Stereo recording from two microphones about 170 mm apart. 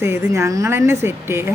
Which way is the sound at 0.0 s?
15° right (ahead or behind).